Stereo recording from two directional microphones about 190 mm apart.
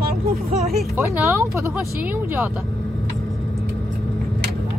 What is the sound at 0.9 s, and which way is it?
Speech, 15° right (ahead or behind).